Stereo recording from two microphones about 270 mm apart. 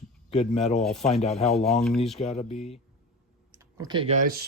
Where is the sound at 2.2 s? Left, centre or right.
Left.